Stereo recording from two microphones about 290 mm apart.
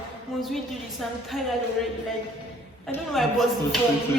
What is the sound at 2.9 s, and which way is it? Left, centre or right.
Speech, centre.